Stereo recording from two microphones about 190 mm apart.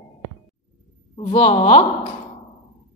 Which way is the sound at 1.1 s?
35° left (ahead or behind).